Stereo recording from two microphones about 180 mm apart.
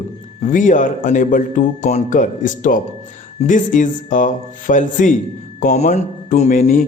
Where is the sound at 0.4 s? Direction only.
45° left (ahead or behind).